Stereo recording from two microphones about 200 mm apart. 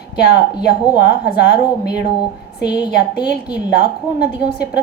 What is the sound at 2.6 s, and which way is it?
Speech, 55° left (ahead or behind).